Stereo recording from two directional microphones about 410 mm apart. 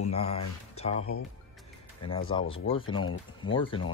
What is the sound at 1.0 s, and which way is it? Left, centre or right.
Speech, left.